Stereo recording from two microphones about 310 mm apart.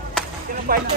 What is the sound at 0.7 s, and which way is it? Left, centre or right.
Speech, right.